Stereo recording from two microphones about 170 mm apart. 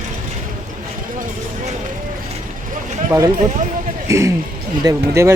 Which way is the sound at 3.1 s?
20° right (ahead or behind).